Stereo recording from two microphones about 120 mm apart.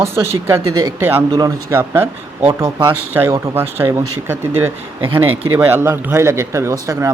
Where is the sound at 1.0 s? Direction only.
15° right (ahead or behind).